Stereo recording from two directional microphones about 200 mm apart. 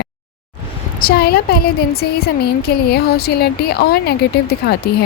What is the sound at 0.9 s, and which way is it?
A woman's voice, 50° left (ahead or behind).